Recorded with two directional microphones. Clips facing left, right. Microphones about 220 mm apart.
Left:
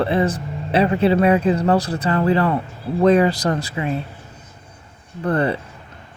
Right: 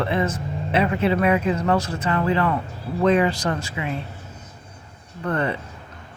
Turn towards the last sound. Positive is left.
turn(degrees=35)  # may be behind; listen again after turning